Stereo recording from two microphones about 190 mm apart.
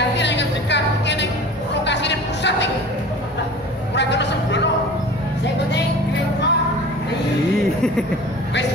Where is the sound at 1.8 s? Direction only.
65° left (ahead or behind).